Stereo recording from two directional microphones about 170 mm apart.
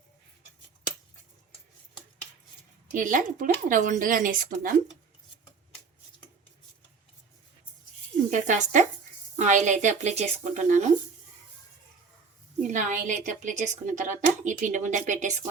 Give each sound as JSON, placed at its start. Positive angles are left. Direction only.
{"t": 2.9, "sound": "a woman's voice", "side_deg": -50}
{"t": 8.3, "sound": "a woman's voice", "side_deg": -50}
{"t": 12.6, "sound": "a woman's voice", "side_deg": -50}